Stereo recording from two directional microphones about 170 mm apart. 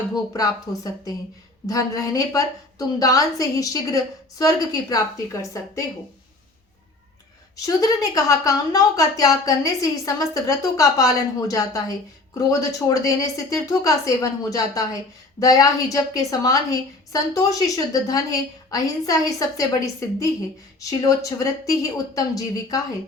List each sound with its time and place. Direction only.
1.6 s speech: 20° left (ahead or behind)
7.5 s speech: 20° left (ahead or behind)